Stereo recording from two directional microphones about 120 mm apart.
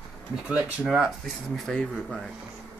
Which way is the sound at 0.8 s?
5° right (ahead or behind).